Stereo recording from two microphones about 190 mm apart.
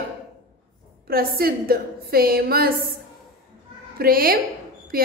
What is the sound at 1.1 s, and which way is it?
A woman's voice, 50° right (ahead or behind).